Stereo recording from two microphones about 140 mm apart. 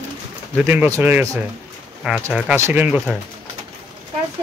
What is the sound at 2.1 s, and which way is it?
Speech, 5° right (ahead or behind).